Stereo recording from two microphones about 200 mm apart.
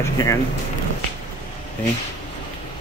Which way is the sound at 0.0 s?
15° left (ahead or behind).